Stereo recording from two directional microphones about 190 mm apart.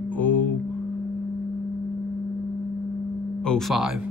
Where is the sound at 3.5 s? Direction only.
Centre (ahead or behind).